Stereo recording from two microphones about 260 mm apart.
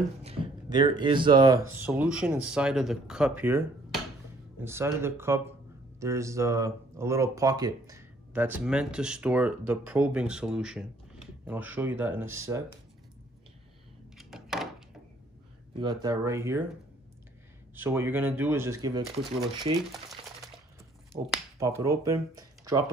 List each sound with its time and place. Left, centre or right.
0.2 s speech: centre
14.1 s a sound: centre
15.8 s speech: centre
17.7 s speech: centre
21.3 s speech: centre